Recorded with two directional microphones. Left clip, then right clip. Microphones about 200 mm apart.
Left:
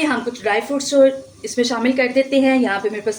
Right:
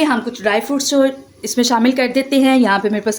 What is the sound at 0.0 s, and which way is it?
Speech, 40° right (ahead or behind).